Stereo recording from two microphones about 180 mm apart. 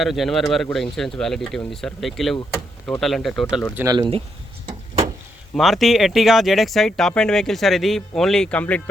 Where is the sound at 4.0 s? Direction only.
30° right (ahead or behind).